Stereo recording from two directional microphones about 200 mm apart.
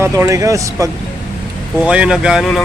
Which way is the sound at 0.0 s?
15° right (ahead or behind).